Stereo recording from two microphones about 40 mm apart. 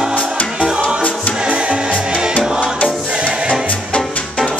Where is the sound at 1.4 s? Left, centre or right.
Right.